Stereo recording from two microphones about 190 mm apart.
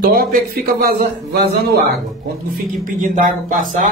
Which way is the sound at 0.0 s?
50° right (ahead or behind).